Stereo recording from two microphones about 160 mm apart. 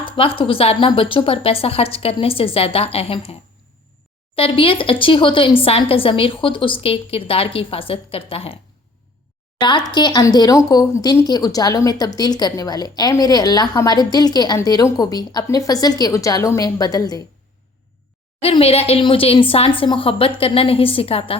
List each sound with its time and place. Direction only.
0.2 s speech: 35° left (ahead or behind)
4.4 s speech: 35° left (ahead or behind)
9.6 s speech: 30° left (ahead or behind)
18.4 s speech: 40° left (ahead or behind)